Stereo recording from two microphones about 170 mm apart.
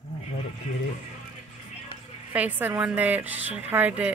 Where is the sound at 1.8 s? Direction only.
10° right (ahead or behind).